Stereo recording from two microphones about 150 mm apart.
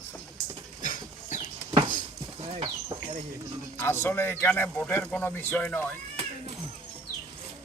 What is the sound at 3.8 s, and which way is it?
Speech, 15° left (ahead or behind).